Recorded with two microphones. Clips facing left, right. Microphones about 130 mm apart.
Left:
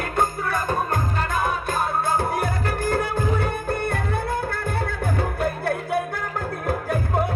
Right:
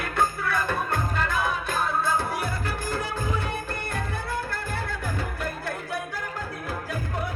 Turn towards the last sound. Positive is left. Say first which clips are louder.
# left 8 dB
turn(degrees=55)  # may be behind; listen again after turning